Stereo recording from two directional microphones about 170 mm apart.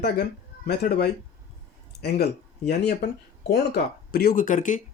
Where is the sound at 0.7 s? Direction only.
65° left (ahead or behind).